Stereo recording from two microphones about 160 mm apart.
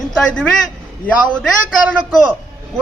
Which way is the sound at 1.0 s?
5° left (ahead or behind).